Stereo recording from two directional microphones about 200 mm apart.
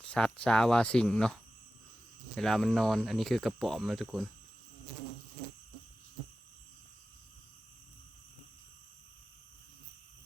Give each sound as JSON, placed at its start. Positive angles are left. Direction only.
{"t": 0.0, "sound": "speech", "side_deg": 5}